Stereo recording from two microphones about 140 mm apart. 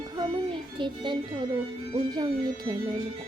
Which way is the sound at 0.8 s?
35° right (ahead or behind).